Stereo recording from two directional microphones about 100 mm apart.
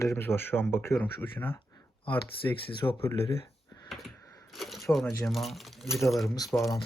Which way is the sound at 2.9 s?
70° left (ahead or behind).